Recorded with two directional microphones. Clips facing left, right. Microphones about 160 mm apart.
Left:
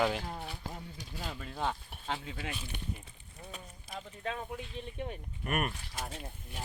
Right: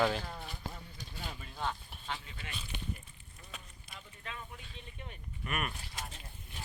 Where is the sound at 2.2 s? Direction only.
90° left.